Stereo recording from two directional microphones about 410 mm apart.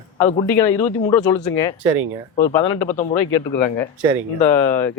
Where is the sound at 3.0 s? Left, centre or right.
Centre.